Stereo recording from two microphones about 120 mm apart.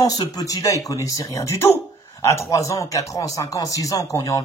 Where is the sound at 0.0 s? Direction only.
30° left (ahead or behind).